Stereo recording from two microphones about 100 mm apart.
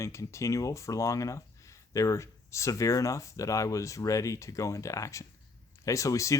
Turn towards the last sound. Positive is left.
turn(degrees=30)  # may be behind; listen again after turning